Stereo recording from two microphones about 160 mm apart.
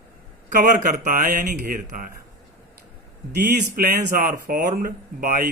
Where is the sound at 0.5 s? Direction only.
55° right (ahead or behind).